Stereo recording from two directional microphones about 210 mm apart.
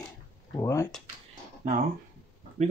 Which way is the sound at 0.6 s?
15° left (ahead or behind).